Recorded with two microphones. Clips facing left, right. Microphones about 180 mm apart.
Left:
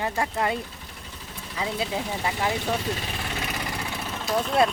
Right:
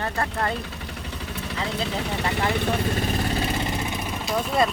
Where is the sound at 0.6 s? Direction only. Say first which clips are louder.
Right 5 dB; 75° right (ahead or behind).